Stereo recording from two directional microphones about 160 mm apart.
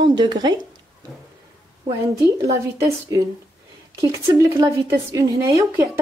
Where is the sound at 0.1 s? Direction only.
25° right (ahead or behind).